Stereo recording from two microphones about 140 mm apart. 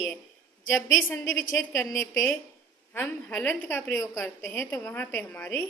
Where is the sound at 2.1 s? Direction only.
5° left (ahead or behind).